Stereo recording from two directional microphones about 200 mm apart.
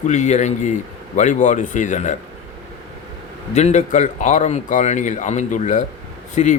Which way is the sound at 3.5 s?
35° left (ahead or behind).